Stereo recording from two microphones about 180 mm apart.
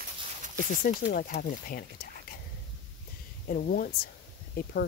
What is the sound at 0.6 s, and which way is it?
Speech, 50° left (ahead or behind).